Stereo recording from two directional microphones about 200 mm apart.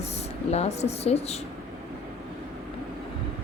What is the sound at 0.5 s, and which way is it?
Speech, 30° left (ahead or behind).